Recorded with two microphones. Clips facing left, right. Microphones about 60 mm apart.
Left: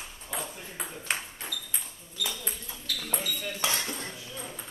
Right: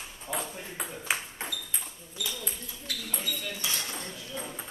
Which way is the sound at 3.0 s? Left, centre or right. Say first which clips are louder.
Left 3 dB; left.